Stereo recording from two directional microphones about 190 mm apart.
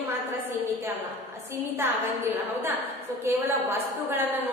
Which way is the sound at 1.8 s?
10° right (ahead or behind).